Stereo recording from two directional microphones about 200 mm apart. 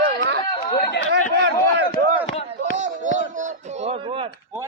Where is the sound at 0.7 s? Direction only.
55° left (ahead or behind).